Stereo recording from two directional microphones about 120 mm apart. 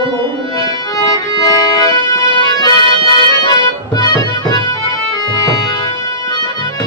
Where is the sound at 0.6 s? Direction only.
30° left (ahead or behind).